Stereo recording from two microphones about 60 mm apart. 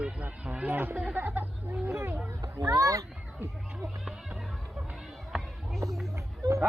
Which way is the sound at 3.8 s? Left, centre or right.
Centre.